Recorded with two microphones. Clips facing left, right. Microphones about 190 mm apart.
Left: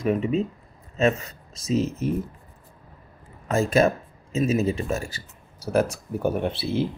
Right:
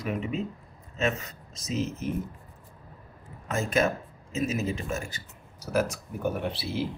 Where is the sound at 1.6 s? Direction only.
30° left (ahead or behind).